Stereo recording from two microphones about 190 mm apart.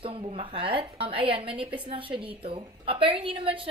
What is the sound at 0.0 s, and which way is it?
Speech, 30° right (ahead or behind).